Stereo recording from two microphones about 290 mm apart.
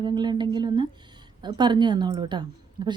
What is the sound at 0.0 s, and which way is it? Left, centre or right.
Speech, centre.